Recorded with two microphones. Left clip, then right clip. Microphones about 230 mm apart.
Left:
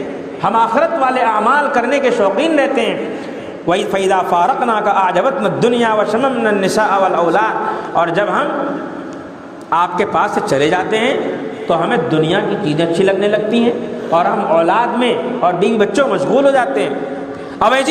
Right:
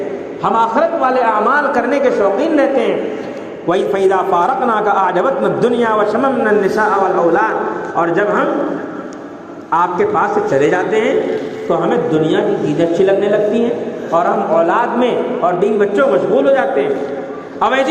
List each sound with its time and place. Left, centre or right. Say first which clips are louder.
0.4 s a man's voice: even; left
9.7 s a man's voice: right 1 dB; left